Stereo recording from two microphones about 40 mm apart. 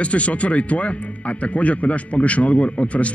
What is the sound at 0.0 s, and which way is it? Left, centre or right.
Speech, left.